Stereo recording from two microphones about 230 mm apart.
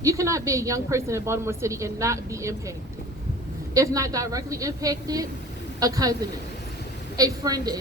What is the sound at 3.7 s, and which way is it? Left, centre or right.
A woman's voice, centre.